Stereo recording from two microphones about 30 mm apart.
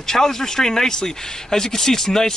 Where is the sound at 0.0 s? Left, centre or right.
Centre.